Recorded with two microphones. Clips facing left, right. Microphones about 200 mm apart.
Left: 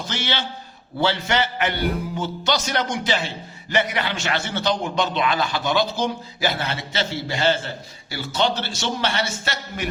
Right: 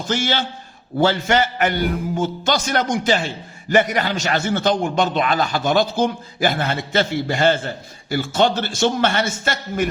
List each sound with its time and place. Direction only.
0.0 s a man's voice: 45° right (ahead or behind)